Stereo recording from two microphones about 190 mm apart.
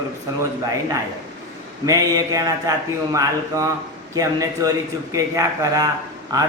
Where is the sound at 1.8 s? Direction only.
15° right (ahead or behind).